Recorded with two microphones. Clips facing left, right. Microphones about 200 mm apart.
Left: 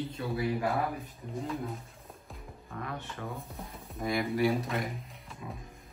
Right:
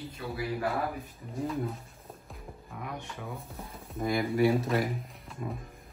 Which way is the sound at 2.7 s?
10° right (ahead or behind).